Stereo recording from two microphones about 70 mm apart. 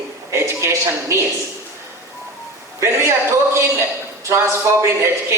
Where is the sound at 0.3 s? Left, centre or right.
Right.